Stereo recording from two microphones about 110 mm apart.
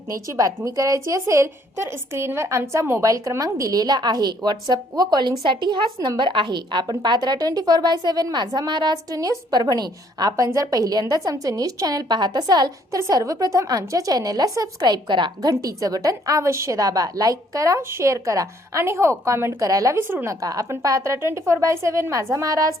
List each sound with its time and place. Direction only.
0.1 s a woman's voice: 30° right (ahead or behind)